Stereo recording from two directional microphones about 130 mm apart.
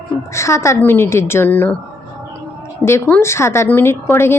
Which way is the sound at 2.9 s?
15° left (ahead or behind).